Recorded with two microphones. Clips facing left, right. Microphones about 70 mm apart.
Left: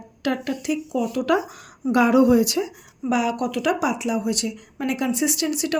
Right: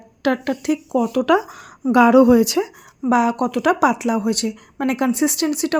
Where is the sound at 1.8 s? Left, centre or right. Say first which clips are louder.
Right 5 dB; right.